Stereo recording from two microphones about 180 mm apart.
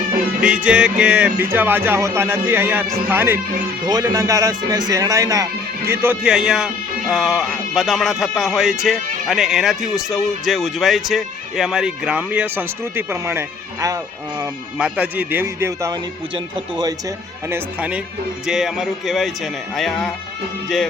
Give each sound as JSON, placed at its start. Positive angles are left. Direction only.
{"t": 0.4, "sound": "speech", "side_deg": -5}
{"t": 14.8, "sound": "speech", "side_deg": -5}
{"t": 16.3, "sound": "speech", "side_deg": -25}
{"t": 17.5, "sound": "speech", "side_deg": -5}